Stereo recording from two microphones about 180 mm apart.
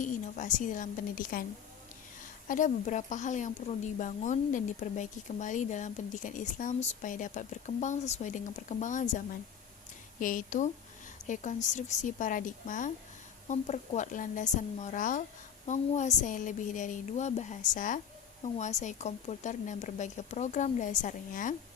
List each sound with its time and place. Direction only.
0.0 s a woman's voice: 45° left (ahead or behind)
10.2 s a woman's voice: 50° left (ahead or behind)